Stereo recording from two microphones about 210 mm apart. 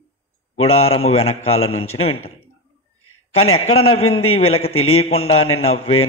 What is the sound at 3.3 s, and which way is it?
Speech, 80° left.